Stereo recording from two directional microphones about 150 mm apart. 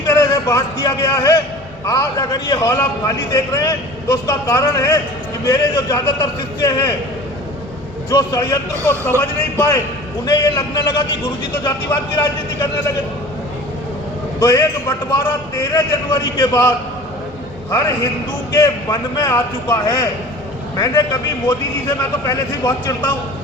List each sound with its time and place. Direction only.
0.1 s a man's voice: 20° left (ahead or behind)
8.1 s a man's voice: 25° left (ahead or behind)
14.3 s a man's voice: 25° left (ahead or behind)